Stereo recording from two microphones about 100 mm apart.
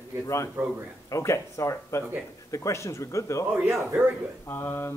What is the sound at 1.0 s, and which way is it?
Speech, 30° left (ahead or behind).